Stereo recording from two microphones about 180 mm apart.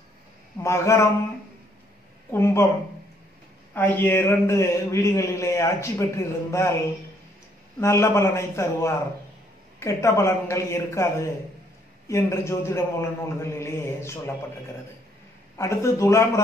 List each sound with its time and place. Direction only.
0.6 s speech: 15° left (ahead or behind)
2.3 s speech: 15° left (ahead or behind)
3.7 s speech: 10° left (ahead or behind)
7.8 s speech: 15° left (ahead or behind)
15.5 s speech: 15° left (ahead or behind)